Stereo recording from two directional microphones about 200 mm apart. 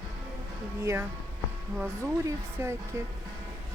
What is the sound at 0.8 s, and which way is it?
Speech, 15° right (ahead or behind).